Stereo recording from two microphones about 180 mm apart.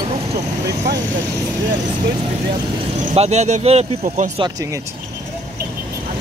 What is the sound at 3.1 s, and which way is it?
Speech, 35° right (ahead or behind).